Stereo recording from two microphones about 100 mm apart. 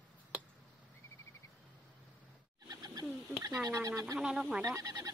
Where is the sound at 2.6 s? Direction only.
40° right (ahead or behind).